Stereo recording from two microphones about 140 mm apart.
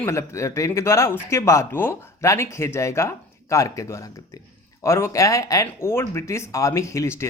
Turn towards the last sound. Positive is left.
turn(degrees=20)  # may be behind; listen again after turning